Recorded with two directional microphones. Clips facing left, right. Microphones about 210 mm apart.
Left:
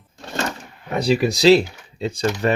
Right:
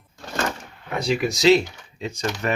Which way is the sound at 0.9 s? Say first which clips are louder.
Left 4 dB; 35° left (ahead or behind).